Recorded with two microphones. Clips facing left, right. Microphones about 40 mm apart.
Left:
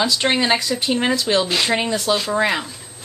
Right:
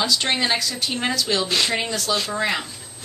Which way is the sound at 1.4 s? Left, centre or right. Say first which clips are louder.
Left 2 dB; centre.